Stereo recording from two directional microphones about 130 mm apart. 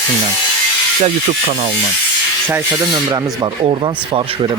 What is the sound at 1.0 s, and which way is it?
Speech, 55° right (ahead or behind).